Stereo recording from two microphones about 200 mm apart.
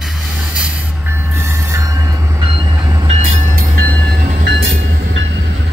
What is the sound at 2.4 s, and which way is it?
Train, 25° right (ahead or behind).